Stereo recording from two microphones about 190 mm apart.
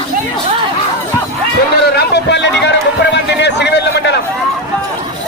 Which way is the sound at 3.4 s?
65° left (ahead or behind).